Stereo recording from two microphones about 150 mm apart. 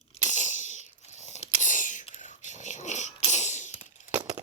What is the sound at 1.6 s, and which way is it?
Whispering, 60° left (ahead or behind).